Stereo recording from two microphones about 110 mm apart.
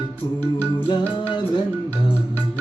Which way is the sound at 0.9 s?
45° left (ahead or behind).